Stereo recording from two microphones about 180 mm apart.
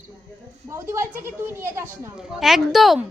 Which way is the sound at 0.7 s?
15° right (ahead or behind).